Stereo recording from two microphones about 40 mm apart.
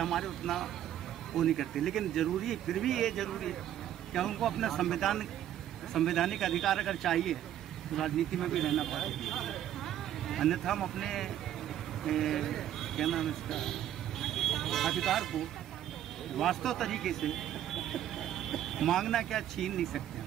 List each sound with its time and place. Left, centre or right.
0.0 s speech: centre